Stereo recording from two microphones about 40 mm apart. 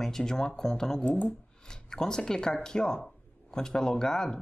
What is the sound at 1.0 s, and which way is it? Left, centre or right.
Speech, left.